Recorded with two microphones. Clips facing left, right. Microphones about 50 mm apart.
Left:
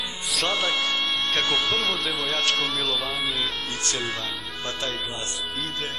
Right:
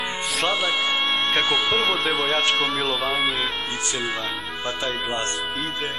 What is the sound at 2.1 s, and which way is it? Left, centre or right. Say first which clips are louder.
Speech: right 4 dB; right.